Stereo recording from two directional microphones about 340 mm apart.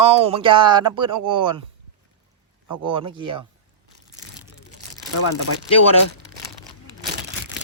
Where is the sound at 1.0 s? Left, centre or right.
Right.